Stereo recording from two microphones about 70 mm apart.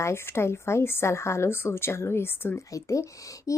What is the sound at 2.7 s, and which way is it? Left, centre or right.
Speech, left.